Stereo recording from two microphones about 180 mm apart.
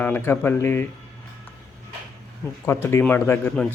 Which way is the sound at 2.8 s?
10° left (ahead or behind).